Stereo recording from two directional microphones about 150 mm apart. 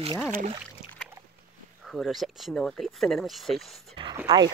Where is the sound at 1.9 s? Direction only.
Centre (ahead or behind).